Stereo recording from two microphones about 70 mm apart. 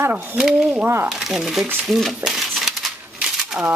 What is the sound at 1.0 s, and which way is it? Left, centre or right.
Speech, centre.